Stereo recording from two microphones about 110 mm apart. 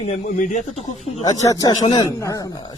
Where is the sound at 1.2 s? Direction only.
35° left (ahead or behind).